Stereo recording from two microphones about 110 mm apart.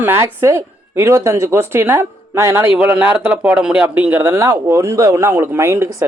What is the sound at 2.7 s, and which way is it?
Speech, 10° right (ahead or behind).